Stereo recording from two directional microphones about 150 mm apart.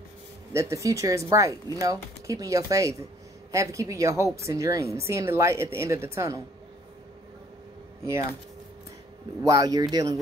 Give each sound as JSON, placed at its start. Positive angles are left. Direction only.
{"t": 0.5, "sound": "speech", "side_deg": -20}
{"t": 8.0, "sound": "speech", "side_deg": -20}
{"t": 9.4, "sound": "speech", "side_deg": -25}